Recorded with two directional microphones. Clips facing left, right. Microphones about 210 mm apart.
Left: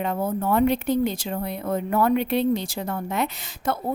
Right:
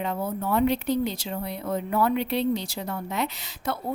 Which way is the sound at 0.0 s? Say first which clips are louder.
Left 4 dB; 50° left (ahead or behind).